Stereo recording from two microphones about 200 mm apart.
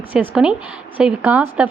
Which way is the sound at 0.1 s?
5° right (ahead or behind).